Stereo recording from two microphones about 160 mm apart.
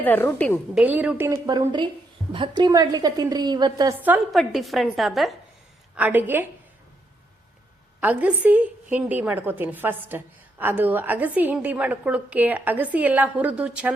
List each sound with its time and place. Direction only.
0.0 s a woman's voice: 10° left (ahead or behind)
0.8 s a woman's voice: 10° right (ahead or behind)
1.5 s a woman's voice: 25° right (ahead or behind)
4.3 s a woman's voice: centre (ahead or behind)
5.9 s a woman's voice: 10° right (ahead or behind)
8.0 s a woman's voice: 10° right (ahead or behind)